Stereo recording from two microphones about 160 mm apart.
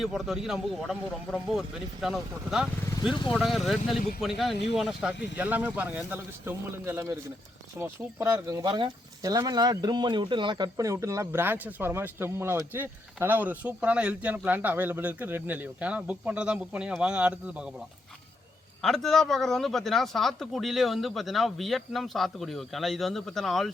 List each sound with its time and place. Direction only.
0.0 s speech: centre (ahead or behind)